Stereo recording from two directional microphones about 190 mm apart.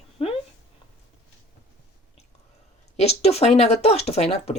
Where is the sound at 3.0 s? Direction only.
35° left (ahead or behind).